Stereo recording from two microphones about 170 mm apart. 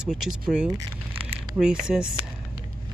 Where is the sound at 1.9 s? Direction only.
5° right (ahead or behind).